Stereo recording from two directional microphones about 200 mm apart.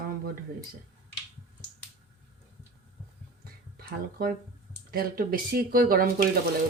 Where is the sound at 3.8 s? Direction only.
50° right (ahead or behind).